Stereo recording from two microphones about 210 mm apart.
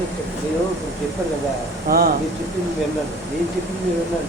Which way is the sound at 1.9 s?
45° right (ahead or behind).